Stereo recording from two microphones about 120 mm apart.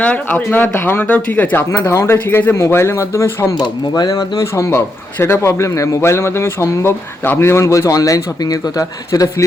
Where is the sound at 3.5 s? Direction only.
35° left (ahead or behind).